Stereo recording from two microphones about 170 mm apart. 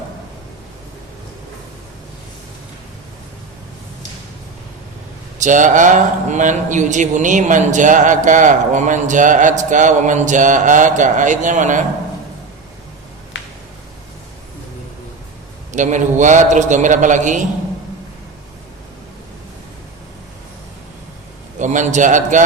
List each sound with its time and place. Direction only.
5.4 s a man's voice: 50° right (ahead or behind)
13.3 s a sound: 90° left
15.7 s a man's voice: 45° right (ahead or behind)
21.6 s a man's voice: 45° right (ahead or behind)